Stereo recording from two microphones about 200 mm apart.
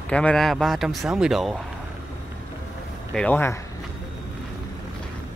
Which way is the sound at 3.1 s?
5° left (ahead or behind).